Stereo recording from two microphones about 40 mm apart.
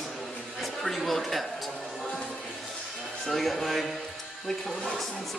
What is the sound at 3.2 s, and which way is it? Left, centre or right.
Speech, centre.